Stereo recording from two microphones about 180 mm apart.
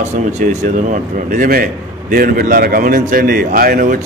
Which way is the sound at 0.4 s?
50° right (ahead or behind).